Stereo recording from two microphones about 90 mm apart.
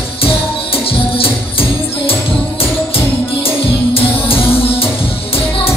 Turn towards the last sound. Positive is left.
turn(degrees=90)